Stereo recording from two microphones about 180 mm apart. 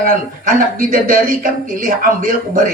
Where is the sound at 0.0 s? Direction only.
50° right (ahead or behind).